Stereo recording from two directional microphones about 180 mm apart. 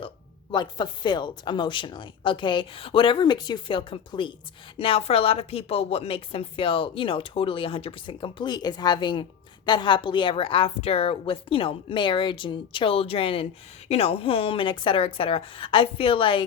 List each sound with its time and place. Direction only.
0.5 s a woman's voice: 25° left (ahead or behind)